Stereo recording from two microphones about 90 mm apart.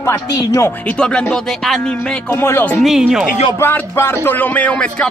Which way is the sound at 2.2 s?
25° left (ahead or behind).